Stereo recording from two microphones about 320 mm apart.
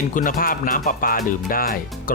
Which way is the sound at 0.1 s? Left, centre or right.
Left.